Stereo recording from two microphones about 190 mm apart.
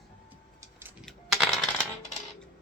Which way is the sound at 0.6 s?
10° right (ahead or behind).